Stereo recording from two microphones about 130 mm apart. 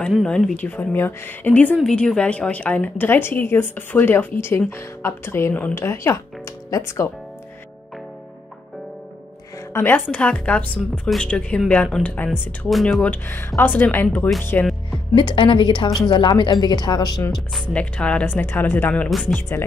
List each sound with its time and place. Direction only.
0.1 s a woman's voice: centre (ahead or behind); by 7.1 s 25° left (ahead or behind)
9.8 s a woman's voice: 15° left (ahead or behind)
12.3 s a woman's voice: centre (ahead or behind); by 14.7 s 15° left (ahead or behind)
15.1 s a woman's voice: 40° left (ahead or behind)
17.7 s a woman's voice: 10° left (ahead or behind)